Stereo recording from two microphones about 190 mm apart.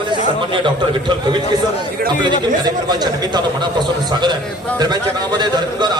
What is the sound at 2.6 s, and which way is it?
A man's voice, 20° right (ahead or behind).